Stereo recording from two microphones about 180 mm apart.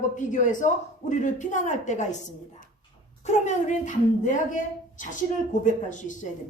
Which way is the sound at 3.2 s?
40° left (ahead or behind).